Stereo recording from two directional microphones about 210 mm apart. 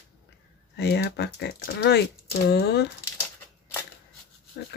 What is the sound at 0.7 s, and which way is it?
Speech, 55° left (ahead or behind).